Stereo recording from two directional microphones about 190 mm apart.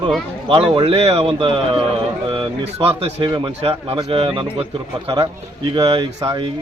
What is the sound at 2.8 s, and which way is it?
Speech, 30° right (ahead or behind).